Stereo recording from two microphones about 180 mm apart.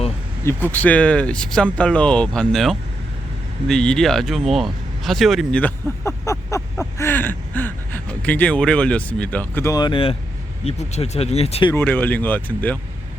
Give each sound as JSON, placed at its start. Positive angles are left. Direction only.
{"t": 0.4, "sound": "speech", "side_deg": 10}
{"t": 11.7, "sound": "speech", "side_deg": 10}